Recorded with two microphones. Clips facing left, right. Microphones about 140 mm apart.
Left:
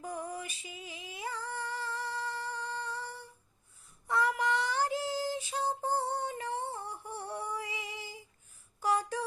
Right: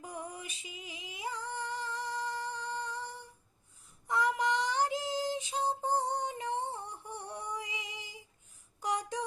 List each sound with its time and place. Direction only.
0.0 s singing: 15° right (ahead or behind)
4.0 s female singing: 15° right (ahead or behind)